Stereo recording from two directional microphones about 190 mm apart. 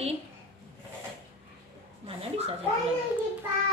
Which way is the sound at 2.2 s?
30° right (ahead or behind).